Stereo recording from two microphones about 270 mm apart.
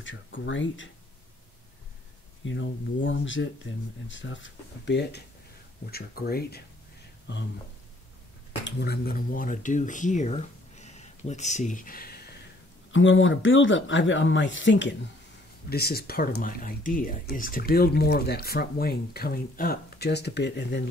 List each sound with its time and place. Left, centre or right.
0.0 s speech: left
2.4 s speech: left
8.6 s speech: left
12.9 s speech: left